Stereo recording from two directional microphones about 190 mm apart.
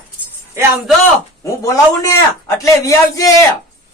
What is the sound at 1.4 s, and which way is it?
A man's voice, 15° left (ahead or behind).